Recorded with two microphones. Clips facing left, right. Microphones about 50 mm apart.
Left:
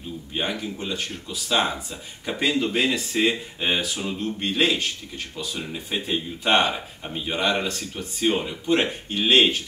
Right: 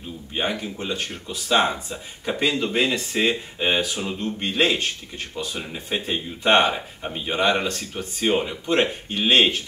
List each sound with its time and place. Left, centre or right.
0.3 s speech: centre